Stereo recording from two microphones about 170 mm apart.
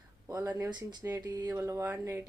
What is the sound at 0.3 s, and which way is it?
Speech, 20° right (ahead or behind).